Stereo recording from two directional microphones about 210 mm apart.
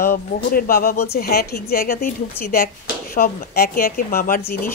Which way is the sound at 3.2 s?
45° left (ahead or behind).